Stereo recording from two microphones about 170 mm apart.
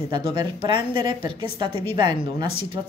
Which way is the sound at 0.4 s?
30° right (ahead or behind).